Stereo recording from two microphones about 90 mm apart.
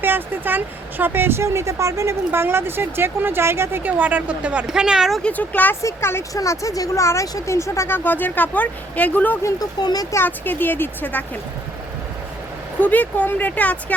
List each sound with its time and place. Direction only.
0.0 s speech: 25° right (ahead or behind); by 5.2 s 5° right (ahead or behind)
5.2 s speech: 20° left (ahead or behind)
9.4 s speech: 35° left (ahead or behind)
10.2 s speech: 20° left (ahead or behind)
12.8 s speech: 20° left (ahead or behind)